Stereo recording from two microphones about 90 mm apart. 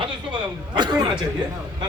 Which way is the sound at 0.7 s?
55° right (ahead or behind).